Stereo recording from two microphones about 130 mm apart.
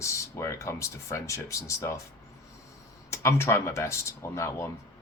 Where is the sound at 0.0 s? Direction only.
25° left (ahead or behind).